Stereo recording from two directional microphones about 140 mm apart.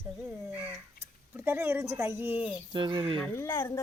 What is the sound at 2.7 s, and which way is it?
Speech, 35° right (ahead or behind).